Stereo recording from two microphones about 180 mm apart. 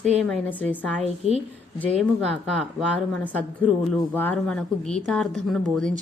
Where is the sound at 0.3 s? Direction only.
10° left (ahead or behind).